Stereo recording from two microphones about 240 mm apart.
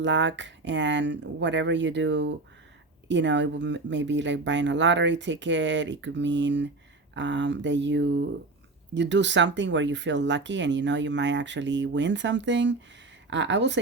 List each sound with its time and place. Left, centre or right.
0.0 s speech: right